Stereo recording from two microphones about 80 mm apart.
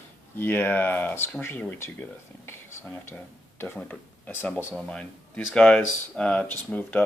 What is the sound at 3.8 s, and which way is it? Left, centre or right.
Speech, centre.